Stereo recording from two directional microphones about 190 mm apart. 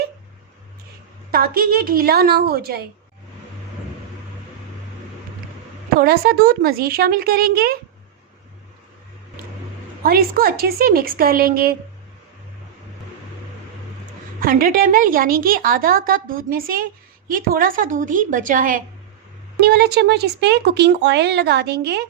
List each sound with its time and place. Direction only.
1.3 s a woman's voice: 50° right (ahead or behind)
6.0 s a woman's voice: 55° right (ahead or behind)
10.0 s a woman's voice: 50° right (ahead or behind)
14.4 s a woman's voice: 50° right (ahead or behind)
19.5 s speech: 55° right (ahead or behind)